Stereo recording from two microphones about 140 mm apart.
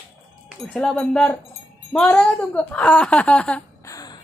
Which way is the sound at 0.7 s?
5° left (ahead or behind).